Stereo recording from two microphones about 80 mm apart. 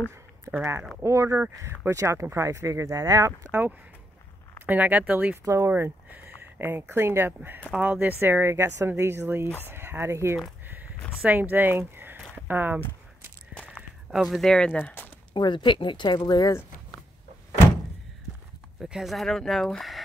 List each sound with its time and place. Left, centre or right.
0.5 s a sound: right
1.0 s speech: right
4.6 s speech: centre
5.4 s speech: right
5.7 s speech: right
7.7 s speech: right
11.2 s speech: right
14.1 s speech: centre
14.8 s speech: left
15.3 s speech: left
16.3 s speech: left
18.8 s speech: centre